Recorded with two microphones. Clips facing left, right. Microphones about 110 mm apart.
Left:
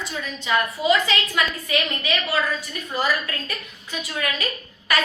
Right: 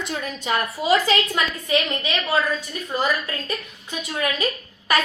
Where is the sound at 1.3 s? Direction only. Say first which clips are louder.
Even; 30° right (ahead or behind).